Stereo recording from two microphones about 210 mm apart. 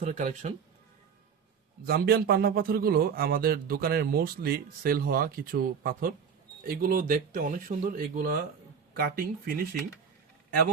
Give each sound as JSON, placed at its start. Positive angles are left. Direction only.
{"t": 0.0, "sound": "speech", "side_deg": -35}
{"t": 1.9, "sound": "a man's voice", "side_deg": -45}